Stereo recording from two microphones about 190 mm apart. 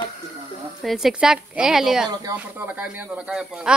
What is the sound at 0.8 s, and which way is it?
Speech, centre (ahead or behind).